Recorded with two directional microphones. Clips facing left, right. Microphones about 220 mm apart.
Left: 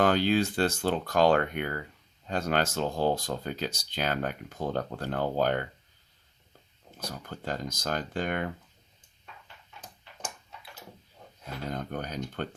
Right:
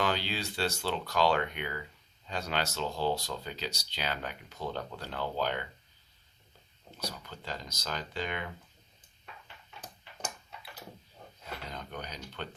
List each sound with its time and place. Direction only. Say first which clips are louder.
0.0 s speech: left 9 dB; 50° left (ahead or behind)
6.9 s speech: left 2 dB; 50° left (ahead or behind)
11.7 s speech: left 11 dB; 45° left (ahead or behind)